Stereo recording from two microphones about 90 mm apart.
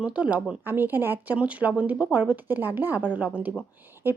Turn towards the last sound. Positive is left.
turn(degrees=-25)  # may be behind; listen again after turning